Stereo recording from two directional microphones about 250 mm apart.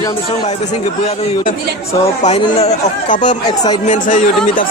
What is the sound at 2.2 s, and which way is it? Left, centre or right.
Speech, left.